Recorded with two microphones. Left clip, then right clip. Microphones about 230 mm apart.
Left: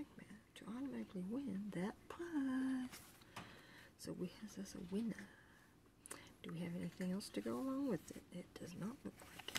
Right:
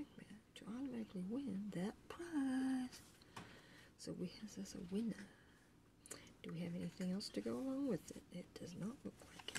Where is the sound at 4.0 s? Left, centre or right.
Centre.